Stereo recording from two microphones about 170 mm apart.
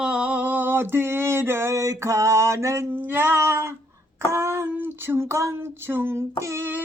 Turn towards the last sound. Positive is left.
turn(degrees=-15)  # may be behind; listen again after turning